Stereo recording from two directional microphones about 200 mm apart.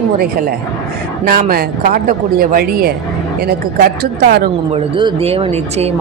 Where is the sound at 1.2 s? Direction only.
45° right (ahead or behind).